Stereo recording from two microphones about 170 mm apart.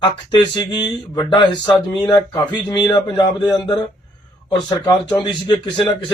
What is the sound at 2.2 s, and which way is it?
Speech, 5° left (ahead or behind).